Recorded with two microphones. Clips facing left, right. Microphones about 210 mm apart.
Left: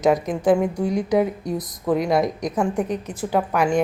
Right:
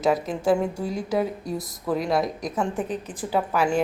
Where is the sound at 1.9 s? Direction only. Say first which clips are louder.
Left 4 dB; centre (ahead or behind).